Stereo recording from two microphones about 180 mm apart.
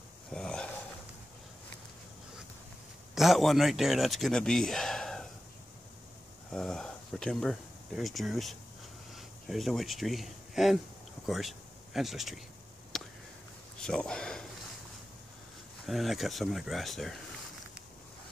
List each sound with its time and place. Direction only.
0.3 s a sound: 5° left (ahead or behind)
3.2 s a man's voice: centre (ahead or behind)
6.5 s speech: 5° left (ahead or behind)
12.9 s a sound: centre (ahead or behind)
13.7 s speech: 5° left (ahead or behind)
15.9 s a man's voice: centre (ahead or behind)